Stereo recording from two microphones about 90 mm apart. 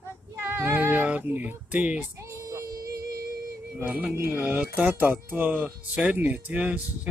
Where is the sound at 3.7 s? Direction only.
15° right (ahead or behind).